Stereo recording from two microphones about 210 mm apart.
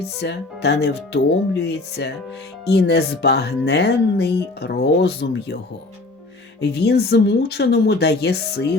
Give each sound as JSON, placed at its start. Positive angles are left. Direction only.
{"t": 0.0, "sound": "speech", "side_deg": 50}
{"t": 6.6, "sound": "speech", "side_deg": 50}